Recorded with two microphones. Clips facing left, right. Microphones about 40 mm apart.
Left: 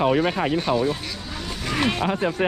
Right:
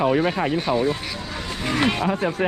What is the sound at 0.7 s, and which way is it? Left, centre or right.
Speech, left.